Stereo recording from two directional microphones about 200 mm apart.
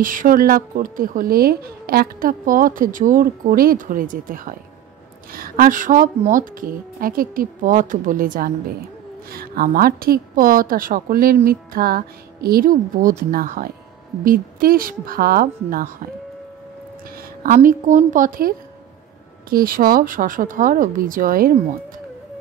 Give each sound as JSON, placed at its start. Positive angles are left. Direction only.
{"t": 0.0, "sound": "speech", "side_deg": -40}
{"t": 17.4, "sound": "a woman's voice", "side_deg": -40}
{"t": 19.5, "sound": "speech", "side_deg": -45}